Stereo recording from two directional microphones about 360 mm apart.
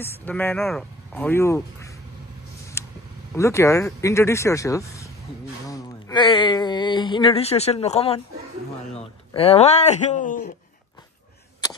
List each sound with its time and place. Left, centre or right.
0.0 s speech: centre
2.8 s vehicle: centre
3.3 s speech: centre
9.3 s speech: centre